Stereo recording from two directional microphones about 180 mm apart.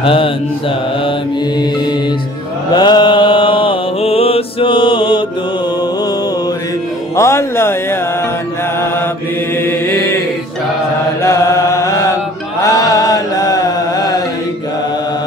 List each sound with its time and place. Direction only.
0.0 s mantra: 30° left (ahead or behind)
2.7 s mantra: 25° left (ahead or behind)
7.2 s music: 15° left (ahead or behind)
11.2 s chant: 15° left (ahead or behind)
12.6 s mantra: 20° left (ahead or behind)